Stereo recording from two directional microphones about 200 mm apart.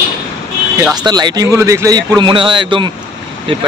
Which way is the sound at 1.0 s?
20° right (ahead or behind).